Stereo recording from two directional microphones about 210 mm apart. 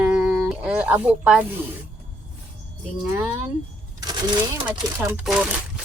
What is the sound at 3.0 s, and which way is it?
Speech, 5° right (ahead or behind).